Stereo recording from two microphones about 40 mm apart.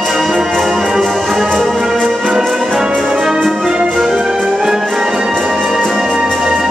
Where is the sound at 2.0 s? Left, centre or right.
Centre.